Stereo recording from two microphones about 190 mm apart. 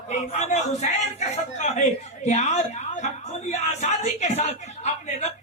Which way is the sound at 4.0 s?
35° left (ahead or behind).